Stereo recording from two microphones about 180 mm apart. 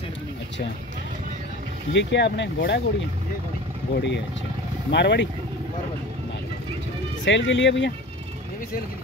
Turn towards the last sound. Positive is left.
turn(degrees=90)